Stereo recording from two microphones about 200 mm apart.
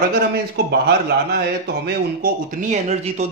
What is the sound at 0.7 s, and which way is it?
Speech, 55° right (ahead or behind).